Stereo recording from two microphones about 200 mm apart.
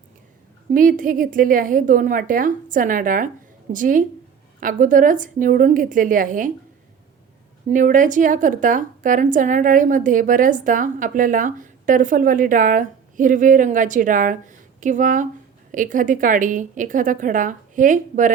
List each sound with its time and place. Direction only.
0.7 s a woman's voice: 45° right (ahead or behind)
7.7 s a woman's voice: 40° right (ahead or behind)